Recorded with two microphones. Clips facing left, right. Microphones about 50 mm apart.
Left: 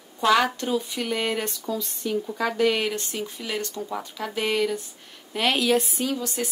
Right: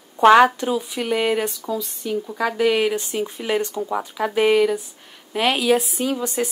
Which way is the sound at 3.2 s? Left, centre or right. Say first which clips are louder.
Right 7 dB; right.